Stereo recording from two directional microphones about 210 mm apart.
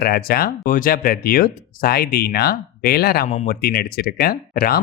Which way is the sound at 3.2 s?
35° left (ahead or behind).